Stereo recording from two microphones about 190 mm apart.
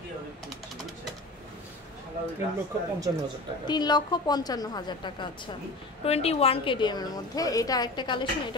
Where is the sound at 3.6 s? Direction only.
20° left (ahead or behind).